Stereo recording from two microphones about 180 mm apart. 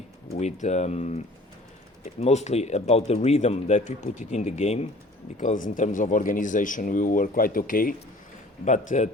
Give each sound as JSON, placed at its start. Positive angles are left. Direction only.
{"t": 0.3, "sound": "speech", "side_deg": 40}